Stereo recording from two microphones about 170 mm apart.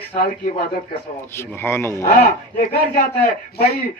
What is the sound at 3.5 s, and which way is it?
Speech, 65° left (ahead or behind).